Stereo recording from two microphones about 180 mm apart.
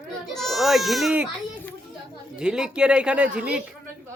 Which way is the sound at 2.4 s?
5° right (ahead or behind).